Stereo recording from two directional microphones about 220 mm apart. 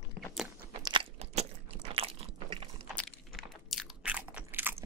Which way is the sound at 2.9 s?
Centre (ahead or behind).